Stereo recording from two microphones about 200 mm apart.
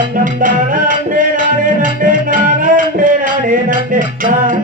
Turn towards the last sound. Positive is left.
turn(degrees=-45)  # may be behind; listen again after turning